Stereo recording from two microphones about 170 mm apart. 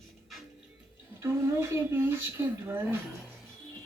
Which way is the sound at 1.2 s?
15° right (ahead or behind).